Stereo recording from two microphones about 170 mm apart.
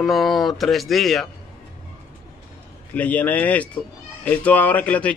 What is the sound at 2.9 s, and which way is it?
A man's voice, 10° left (ahead or behind).